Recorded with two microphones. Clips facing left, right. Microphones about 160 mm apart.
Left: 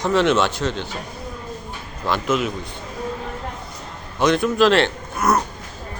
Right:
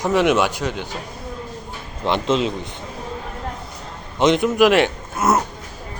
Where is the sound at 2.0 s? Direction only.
25° right (ahead or behind).